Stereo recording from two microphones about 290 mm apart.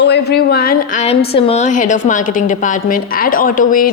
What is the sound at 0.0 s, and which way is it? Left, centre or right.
A woman's voice, left.